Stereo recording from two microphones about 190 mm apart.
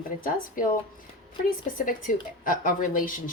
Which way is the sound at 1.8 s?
45° left (ahead or behind).